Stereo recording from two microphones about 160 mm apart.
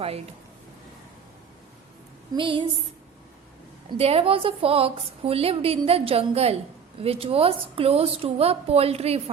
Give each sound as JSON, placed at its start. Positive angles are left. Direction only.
{"t": 2.3, "sound": "a woman's voice", "side_deg": -30}
{"t": 3.8, "sound": "a woman's voice", "side_deg": -40}